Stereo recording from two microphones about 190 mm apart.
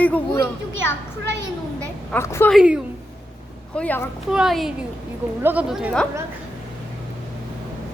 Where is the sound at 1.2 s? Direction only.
65° right (ahead or behind).